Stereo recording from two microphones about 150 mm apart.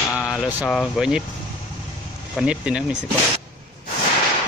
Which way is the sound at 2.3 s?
5° right (ahead or behind).